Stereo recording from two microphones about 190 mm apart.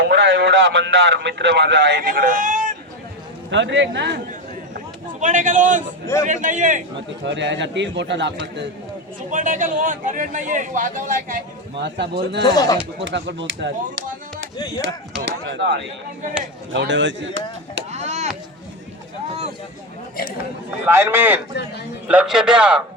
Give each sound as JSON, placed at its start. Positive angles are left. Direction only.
{"t": 0.0, "sound": "a man's voice", "side_deg": -65}
{"t": 2.0, "sound": "speech", "side_deg": -45}
{"t": 3.5, "sound": "a man's voice", "side_deg": -70}
{"t": 5.2, "sound": "a man's voice", "side_deg": -40}
{"t": 7.3, "sound": "a man's voice", "side_deg": -70}
{"t": 9.3, "sound": "a man's voice", "side_deg": -45}
{"t": 11.8, "sound": "a man's voice", "side_deg": -65}
{"t": 12.5, "sound": "speech", "side_deg": 20}
{"t": 13.0, "sound": "a man's voice", "side_deg": -65}
{"t": 15.2, "sound": "a man's voice", "side_deg": -75}
{"t": 16.7, "sound": "a man's voice", "side_deg": -80}
{"t": 17.9, "sound": "chop", "side_deg": -35}
{"t": 20.4, "sound": "a man's voice", "side_deg": -10}